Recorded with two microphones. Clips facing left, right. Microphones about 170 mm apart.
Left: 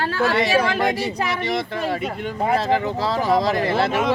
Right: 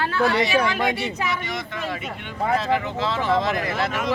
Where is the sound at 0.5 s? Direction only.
35° left (ahead or behind).